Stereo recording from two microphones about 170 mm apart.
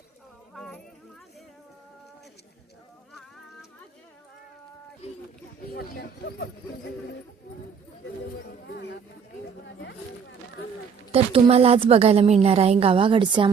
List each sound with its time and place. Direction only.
0.5 s a sound: 5° left (ahead or behind)
3.1 s music: centre (ahead or behind)
5.7 s speech: 70° left (ahead or behind)
8.6 s speech: 90° left
11.1 s a woman's voice: 35° right (ahead or behind)